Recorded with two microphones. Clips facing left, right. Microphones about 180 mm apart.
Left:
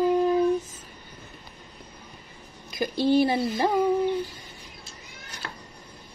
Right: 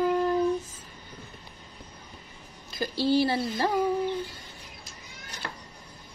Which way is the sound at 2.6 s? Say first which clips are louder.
Left 3 dB; 15° left (ahead or behind).